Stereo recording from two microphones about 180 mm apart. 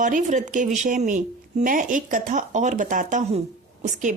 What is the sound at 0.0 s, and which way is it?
Speech, 45° right (ahead or behind).